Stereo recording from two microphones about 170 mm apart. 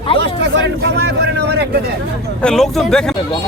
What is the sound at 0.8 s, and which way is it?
Speech, 85° right.